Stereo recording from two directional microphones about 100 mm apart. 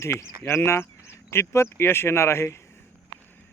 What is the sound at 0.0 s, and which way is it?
Speech, 30° left (ahead or behind).